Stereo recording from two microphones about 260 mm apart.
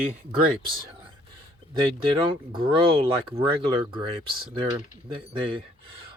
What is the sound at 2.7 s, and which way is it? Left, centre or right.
Speech, right.